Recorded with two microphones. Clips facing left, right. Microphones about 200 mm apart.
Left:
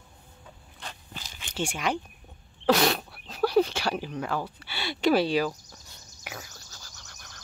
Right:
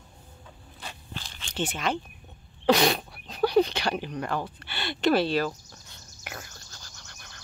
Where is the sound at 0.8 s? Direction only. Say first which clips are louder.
Right 1 dB; 5° right (ahead or behind).